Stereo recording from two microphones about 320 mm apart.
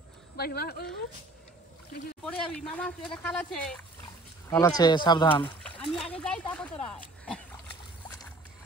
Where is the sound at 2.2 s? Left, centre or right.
Centre.